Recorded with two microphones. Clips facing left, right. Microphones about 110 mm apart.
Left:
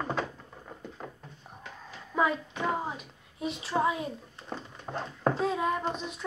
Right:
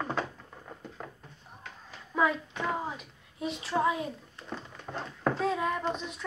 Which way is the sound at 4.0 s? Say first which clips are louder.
Even; 20° left (ahead or behind).